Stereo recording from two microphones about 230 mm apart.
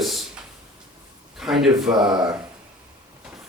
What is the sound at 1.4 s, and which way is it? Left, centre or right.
Speech, centre.